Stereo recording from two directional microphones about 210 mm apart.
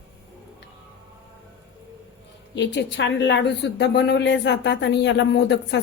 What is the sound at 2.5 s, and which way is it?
A woman's voice, 55° left (ahead or behind).